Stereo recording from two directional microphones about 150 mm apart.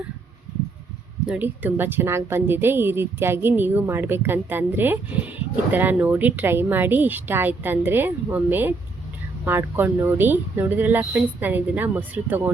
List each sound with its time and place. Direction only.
1.3 s a woman's voice: 10° right (ahead or behind)